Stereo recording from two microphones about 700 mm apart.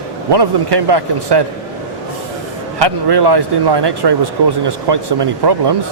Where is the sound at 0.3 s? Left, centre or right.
Right.